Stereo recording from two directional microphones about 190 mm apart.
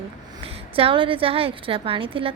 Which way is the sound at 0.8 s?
30° right (ahead or behind).